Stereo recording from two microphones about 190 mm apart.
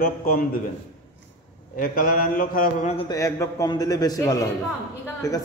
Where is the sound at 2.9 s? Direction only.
20° left (ahead or behind).